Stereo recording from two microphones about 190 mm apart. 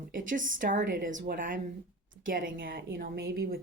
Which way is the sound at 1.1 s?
60° right (ahead or behind).